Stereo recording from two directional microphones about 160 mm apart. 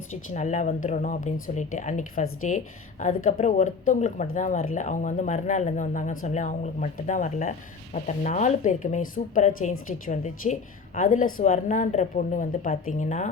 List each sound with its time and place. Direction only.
0.1 s speech: 50° left (ahead or behind)